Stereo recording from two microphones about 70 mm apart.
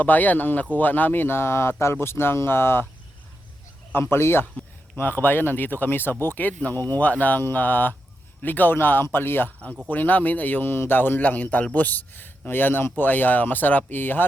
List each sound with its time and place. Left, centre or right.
0.0 s speech: left
3.9 s speech: left